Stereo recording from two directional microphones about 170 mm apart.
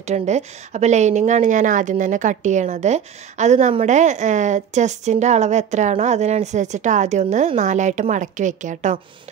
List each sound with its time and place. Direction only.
0.0 s a woman's voice: 40° right (ahead or behind)